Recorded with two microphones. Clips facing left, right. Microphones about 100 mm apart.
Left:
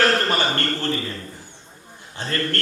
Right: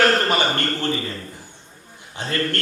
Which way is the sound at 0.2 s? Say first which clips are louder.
Right 1 dB; 15° right (ahead or behind).